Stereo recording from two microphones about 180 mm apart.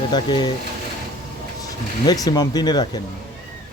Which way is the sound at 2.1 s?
20° left (ahead or behind).